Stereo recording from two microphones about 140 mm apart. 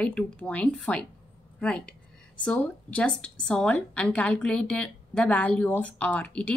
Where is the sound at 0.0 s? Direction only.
10° left (ahead or behind).